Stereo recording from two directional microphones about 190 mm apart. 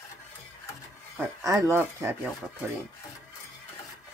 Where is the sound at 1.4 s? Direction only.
15° right (ahead or behind).